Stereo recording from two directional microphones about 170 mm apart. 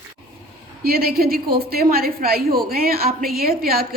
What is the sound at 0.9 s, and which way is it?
A woman's voice, 60° right (ahead or behind).